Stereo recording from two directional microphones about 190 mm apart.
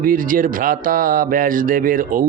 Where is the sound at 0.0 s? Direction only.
45° right (ahead or behind).